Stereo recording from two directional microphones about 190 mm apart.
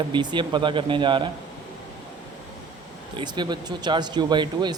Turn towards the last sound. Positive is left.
turn(degrees=-25)  # may be behind; listen again after turning